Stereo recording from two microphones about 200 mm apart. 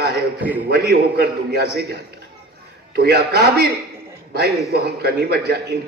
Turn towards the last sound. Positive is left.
turn(degrees=-55)  # may be behind; listen again after turning